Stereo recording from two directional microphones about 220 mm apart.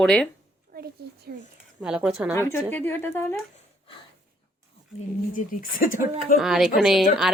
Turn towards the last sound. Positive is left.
turn(degrees=0)  # may be behind; listen again after turning